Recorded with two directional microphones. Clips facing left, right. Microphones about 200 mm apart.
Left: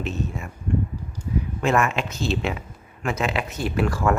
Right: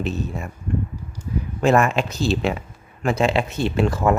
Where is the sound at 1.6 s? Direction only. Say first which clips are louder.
Right 5 dB; 35° right (ahead or behind).